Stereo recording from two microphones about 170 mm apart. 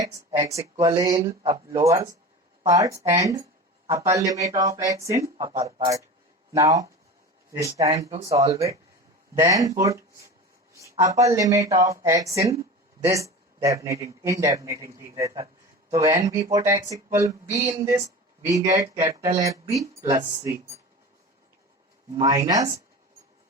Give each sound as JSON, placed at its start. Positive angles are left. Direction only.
{"t": 0.0, "sound": "speech", "side_deg": -20}
{"t": 1.2, "sound": "speech", "side_deg": -35}
{"t": 1.7, "sound": "a man's voice", "side_deg": -20}
{"t": 22.2, "sound": "speech", "side_deg": -20}